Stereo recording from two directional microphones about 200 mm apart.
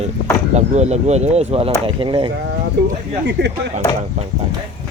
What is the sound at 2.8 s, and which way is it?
Speech, 55° right (ahead or behind).